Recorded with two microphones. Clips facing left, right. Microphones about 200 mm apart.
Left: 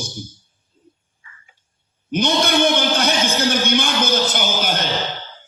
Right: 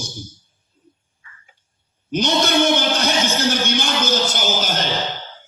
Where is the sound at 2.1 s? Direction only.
55° left (ahead or behind).